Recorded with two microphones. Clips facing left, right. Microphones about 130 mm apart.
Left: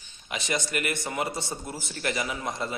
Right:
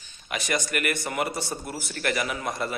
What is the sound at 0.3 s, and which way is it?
A man's voice, 25° left (ahead or behind).